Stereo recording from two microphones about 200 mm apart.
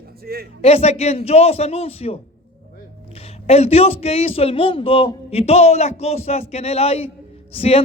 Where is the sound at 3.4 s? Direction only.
30° left (ahead or behind).